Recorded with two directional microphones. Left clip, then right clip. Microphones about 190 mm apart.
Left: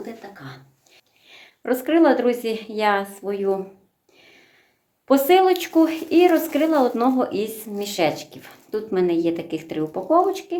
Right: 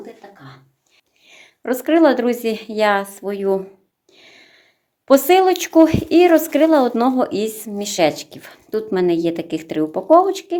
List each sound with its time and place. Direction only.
0.0 s speech: 5° right (ahead or behind)
1.3 s a woman's voice: 30° right (ahead or behind); by 3.6 s 45° right (ahead or behind)
4.2 s a sound: 50° right (ahead or behind)
5.0 s a woman's voice: 45° right (ahead or behind)